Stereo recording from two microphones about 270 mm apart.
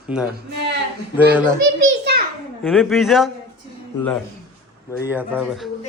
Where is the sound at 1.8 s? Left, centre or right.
Right.